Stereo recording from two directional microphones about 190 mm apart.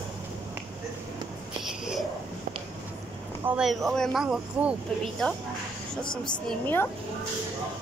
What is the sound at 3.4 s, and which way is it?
Speech, centre (ahead or behind).